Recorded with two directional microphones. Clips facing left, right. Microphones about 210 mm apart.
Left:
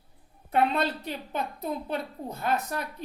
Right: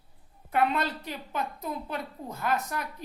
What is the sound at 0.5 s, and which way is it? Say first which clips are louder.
A woman's voice: left 2 dB; 30° left (ahead or behind).